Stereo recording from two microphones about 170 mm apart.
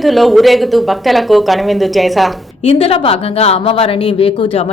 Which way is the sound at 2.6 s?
35° left (ahead or behind).